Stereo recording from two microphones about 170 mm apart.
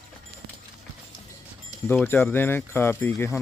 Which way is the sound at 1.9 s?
10° left (ahead or behind).